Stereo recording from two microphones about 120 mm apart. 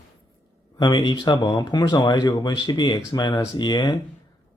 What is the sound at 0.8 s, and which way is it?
Speech, 40° left (ahead or behind).